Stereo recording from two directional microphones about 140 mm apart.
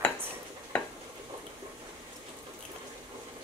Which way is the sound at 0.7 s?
5° left (ahead or behind).